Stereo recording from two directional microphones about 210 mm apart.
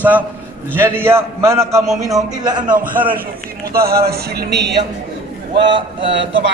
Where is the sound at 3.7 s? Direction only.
45° right (ahead or behind).